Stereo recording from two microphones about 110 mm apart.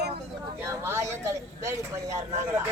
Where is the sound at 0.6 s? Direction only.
25° right (ahead or behind).